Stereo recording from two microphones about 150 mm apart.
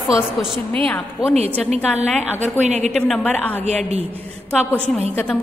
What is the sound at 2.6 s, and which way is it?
Speech, 50° right (ahead or behind).